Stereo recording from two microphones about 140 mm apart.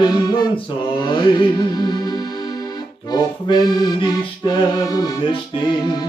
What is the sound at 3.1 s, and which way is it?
Accordion, 30° left (ahead or behind).